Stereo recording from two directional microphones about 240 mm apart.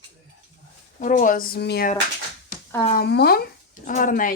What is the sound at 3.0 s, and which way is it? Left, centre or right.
Speech, left.